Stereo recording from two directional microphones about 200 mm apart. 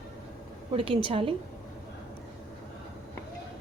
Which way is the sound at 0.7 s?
25° right (ahead or behind).